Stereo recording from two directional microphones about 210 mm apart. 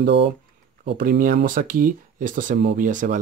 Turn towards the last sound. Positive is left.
turn(degrees=-40)  # may be behind; listen again after turning